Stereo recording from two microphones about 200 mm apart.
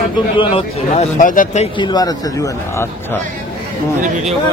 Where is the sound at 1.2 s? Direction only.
40° left (ahead or behind).